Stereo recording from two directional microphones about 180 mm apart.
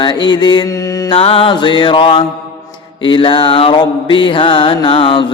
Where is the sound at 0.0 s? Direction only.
25° left (ahead or behind).